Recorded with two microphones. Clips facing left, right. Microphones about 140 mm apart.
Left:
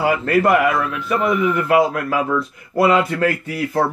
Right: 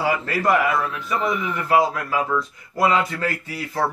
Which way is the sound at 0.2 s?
60° left (ahead or behind).